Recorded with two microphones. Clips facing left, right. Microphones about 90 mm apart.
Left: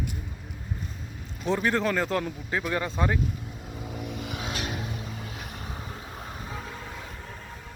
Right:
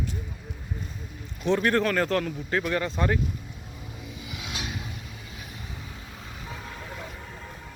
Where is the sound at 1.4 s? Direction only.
10° left (ahead or behind).